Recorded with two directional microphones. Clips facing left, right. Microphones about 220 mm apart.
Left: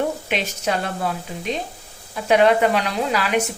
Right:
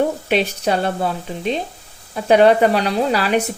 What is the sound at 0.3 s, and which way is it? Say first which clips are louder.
Speech: right 6 dB; 35° right (ahead or behind).